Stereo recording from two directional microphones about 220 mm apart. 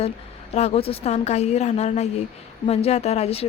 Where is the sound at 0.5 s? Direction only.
30° left (ahead or behind).